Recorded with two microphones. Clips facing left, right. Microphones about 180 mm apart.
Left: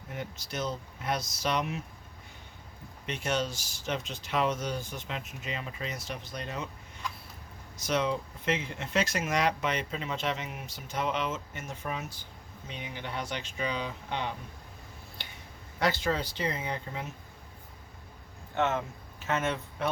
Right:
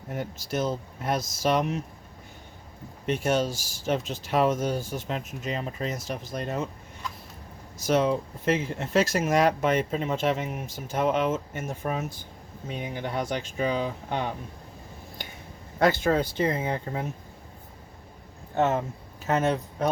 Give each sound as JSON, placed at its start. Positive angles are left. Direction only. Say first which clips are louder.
{"t": 0.1, "sound": "speech", "louder": "right 7 dB", "side_deg": -45}
{"t": 3.2, "sound": "speech", "louder": "right 5 dB", "side_deg": -45}
{"t": 3.5, "sound": "speech", "louder": "right 6 dB", "side_deg": -5}
{"t": 4.1, "sound": "speech", "louder": "right 5 dB", "side_deg": -45}
{"t": 7.9, "sound": "speech", "louder": "right 6 dB", "side_deg": -45}
{"t": 15.8, "sound": "speech", "louder": "right 7 dB", "side_deg": -50}
{"t": 18.5, "sound": "speech", "louder": "right 5 dB", "side_deg": -35}